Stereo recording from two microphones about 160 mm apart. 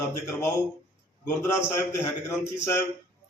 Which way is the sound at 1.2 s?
15° left (ahead or behind).